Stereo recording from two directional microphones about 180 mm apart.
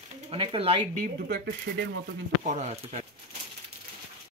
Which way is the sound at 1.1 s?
55° right (ahead or behind).